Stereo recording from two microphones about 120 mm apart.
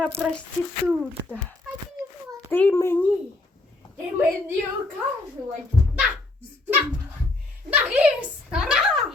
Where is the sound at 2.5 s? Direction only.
20° left (ahead or behind).